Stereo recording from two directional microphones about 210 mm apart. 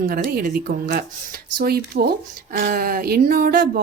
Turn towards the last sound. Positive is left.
turn(degrees=-45)  # may be behind; listen again after turning